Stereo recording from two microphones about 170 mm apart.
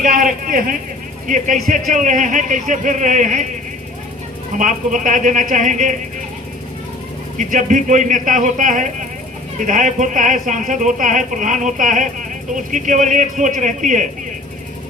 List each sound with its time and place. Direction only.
0.0 s speech: 50° right (ahead or behind)
4.5 s speech: 50° right (ahead or behind)
7.3 s speech: 50° right (ahead or behind)